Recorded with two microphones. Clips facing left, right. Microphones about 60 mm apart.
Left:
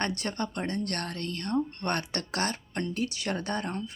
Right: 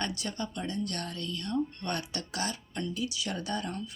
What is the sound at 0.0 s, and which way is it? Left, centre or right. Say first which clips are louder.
Speech: left 4 dB; left.